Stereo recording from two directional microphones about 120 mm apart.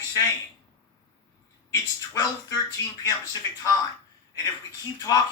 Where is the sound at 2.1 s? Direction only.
30° left (ahead or behind).